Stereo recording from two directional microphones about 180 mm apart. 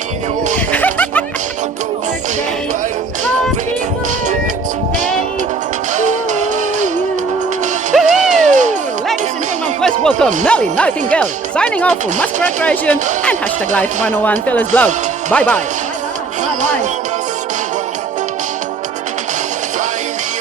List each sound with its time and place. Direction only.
0.5 s a sound: 10° left (ahead or behind)
6.0 s music: 40° right (ahead or behind)
8.0 s music: 40° right (ahead or behind)
9.8 s speech: 5° left (ahead or behind)